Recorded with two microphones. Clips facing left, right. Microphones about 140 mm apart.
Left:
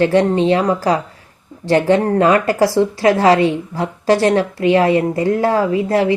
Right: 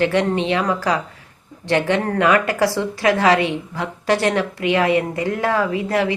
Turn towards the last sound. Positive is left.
turn(degrees=35)  # may be behind; listen again after turning